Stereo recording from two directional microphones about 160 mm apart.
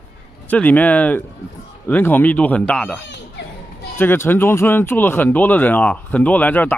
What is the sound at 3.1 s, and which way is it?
Children playing, 90° left.